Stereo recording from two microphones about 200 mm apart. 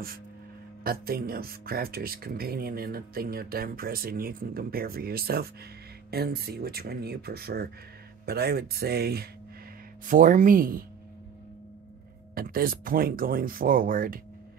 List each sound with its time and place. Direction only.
0.8 s speech: 50° right (ahead or behind)
10.0 s speech: 40° right (ahead or behind)
12.4 s speech: 45° right (ahead or behind)